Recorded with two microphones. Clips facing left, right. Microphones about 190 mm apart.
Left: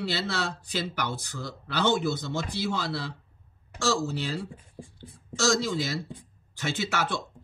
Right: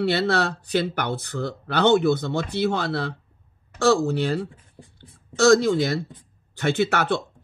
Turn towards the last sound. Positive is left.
turn(degrees=-60)  # may be behind; listen again after turning